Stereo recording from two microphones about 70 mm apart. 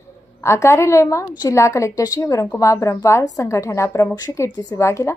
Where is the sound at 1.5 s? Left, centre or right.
Left.